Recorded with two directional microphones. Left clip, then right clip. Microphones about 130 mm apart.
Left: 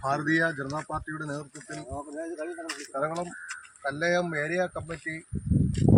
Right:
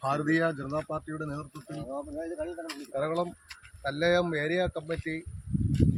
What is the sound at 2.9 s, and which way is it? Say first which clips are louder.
Speech: right 1 dB; 15° right (ahead or behind).